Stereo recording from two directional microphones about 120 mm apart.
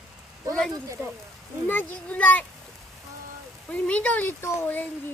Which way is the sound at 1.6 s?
15° left (ahead or behind).